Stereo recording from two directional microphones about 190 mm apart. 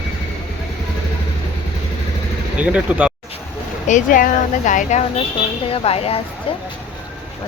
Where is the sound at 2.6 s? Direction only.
5° right (ahead or behind).